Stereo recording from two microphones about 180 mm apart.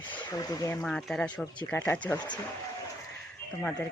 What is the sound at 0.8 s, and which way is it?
Speech, centre (ahead or behind).